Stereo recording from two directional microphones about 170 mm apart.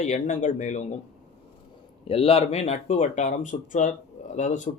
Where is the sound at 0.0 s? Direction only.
45° left (ahead or behind).